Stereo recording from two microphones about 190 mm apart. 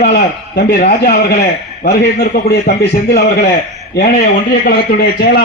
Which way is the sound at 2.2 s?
55° left (ahead or behind).